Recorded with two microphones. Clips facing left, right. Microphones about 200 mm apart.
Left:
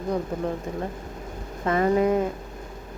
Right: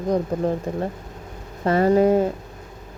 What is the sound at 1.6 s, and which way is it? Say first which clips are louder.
Speech: right 4 dB; 35° right (ahead or behind).